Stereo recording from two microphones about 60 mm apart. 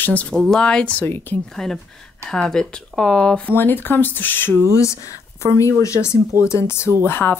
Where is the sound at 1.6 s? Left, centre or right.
Centre.